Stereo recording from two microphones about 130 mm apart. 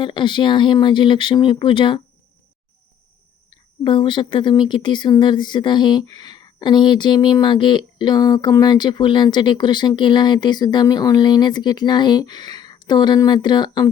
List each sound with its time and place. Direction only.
0.0 s speech: 35° left (ahead or behind)
3.8 s speech: 40° left (ahead or behind)